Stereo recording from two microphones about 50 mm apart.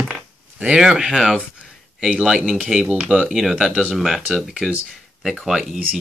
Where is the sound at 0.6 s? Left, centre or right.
Right.